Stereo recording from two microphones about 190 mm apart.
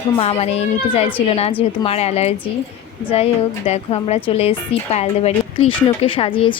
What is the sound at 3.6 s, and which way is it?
A woman's voice, 35° left (ahead or behind).